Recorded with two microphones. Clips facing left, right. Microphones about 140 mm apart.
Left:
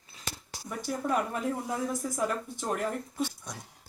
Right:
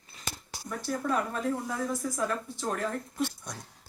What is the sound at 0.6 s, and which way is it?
Speech, 15° left (ahead or behind).